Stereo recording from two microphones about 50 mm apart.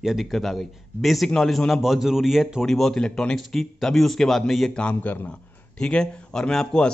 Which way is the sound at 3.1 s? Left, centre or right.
Centre.